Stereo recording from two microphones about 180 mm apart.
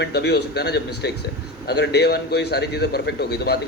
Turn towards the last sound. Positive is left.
turn(degrees=65)  # may be behind; listen again after turning